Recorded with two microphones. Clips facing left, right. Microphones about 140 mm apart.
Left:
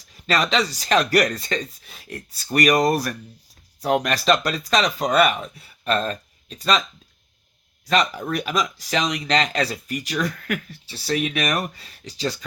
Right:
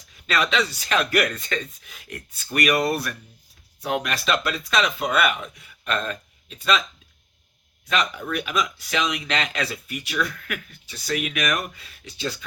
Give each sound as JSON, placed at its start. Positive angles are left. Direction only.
{"t": 0.3, "sound": "speech", "side_deg": 35}
{"t": 7.9, "sound": "speech", "side_deg": 40}